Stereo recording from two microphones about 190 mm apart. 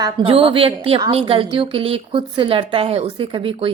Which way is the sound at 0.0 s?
30° right (ahead or behind).